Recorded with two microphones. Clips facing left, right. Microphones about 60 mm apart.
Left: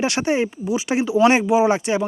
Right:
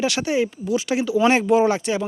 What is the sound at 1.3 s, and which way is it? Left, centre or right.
Speech, centre.